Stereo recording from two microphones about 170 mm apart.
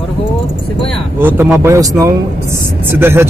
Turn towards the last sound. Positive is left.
turn(degrees=-15)  # may be behind; listen again after turning